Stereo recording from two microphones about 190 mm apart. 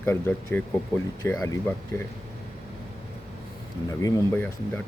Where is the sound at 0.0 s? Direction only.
10° left (ahead or behind).